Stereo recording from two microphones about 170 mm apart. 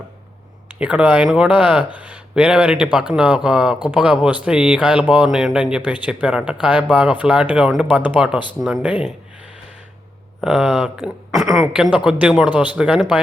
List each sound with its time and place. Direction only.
0.8 s speech: 10° right (ahead or behind)
10.4 s speech: 5° right (ahead or behind)